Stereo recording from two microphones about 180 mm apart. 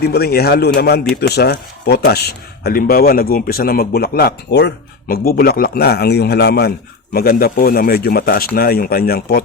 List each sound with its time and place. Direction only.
0.0 s speech: 60° left (ahead or behind)